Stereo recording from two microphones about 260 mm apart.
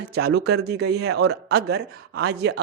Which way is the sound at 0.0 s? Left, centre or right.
Right.